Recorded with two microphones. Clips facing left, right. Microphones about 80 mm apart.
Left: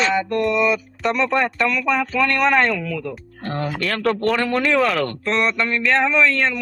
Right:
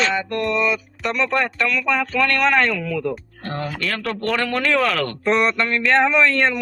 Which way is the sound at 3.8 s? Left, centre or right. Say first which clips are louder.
Left 7 dB; left.